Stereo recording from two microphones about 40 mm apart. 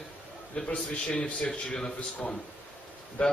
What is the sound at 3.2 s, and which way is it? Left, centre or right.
Speech, left.